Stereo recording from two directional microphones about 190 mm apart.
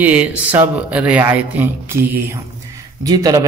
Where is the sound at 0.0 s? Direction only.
10° right (ahead or behind).